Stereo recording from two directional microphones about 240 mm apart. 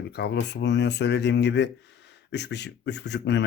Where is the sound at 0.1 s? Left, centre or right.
Left.